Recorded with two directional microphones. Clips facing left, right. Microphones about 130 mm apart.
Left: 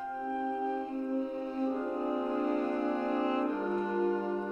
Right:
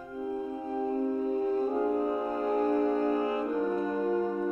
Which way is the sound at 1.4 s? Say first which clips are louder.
Right 5 dB; 45° right (ahead or behind).